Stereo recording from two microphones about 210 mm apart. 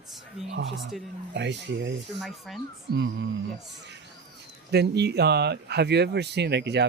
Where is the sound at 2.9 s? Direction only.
60° right (ahead or behind).